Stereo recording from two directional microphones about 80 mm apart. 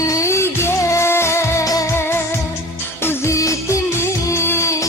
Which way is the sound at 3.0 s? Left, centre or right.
Left.